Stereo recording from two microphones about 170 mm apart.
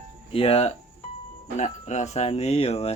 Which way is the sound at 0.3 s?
35° left (ahead or behind).